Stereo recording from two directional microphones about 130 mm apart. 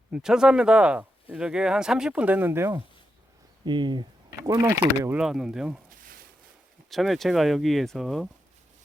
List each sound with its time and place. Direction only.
0.1 s speech: 5° right (ahead or behind); by 2.8 s 20° right (ahead or behind)
3.7 s speech: 35° right (ahead or behind)
4.4 s speech: 25° right (ahead or behind)
5.1 s speech: 5° right (ahead or behind)
6.9 s speech: centre (ahead or behind)